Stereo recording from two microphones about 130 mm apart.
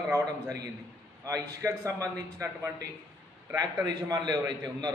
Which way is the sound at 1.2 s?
25° right (ahead or behind).